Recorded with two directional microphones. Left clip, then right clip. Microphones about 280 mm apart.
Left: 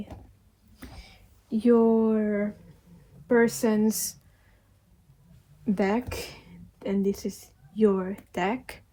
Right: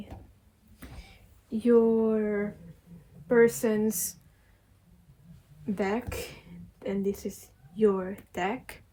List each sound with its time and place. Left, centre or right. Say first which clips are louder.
0.8 s a sound: left 2 dB; left
3.2 s a woman's voice: even; left
5.7 s speech: left 3 dB; left